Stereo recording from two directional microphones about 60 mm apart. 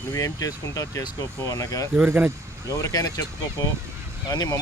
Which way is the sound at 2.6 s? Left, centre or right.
Left.